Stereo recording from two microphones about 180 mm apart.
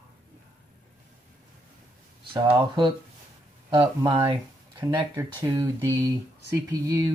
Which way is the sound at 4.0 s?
25° right (ahead or behind).